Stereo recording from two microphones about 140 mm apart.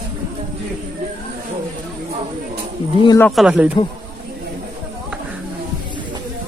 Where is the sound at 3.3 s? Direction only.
5° right (ahead or behind).